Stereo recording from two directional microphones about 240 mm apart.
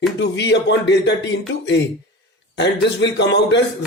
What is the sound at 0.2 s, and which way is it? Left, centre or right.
Speech, left.